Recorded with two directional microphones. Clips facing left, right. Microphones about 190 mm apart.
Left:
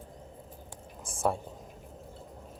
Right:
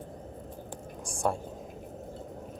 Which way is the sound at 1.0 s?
Centre (ahead or behind).